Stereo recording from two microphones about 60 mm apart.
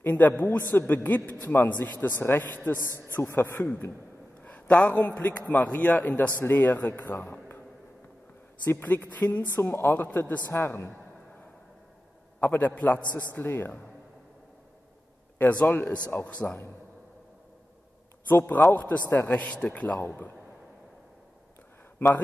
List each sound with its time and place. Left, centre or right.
0.0 s a man's voice: left
4.4 s a man's voice: left
8.6 s speech: left
9.6 s a man's voice: left
10.0 s speech: left
10.5 s a woman's voice: left
12.4 s a man's voice: left
15.3 s speech: left
18.7 s speech: left